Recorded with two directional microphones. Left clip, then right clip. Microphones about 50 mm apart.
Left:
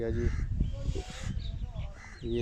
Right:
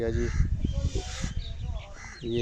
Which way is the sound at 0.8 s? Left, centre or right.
Centre.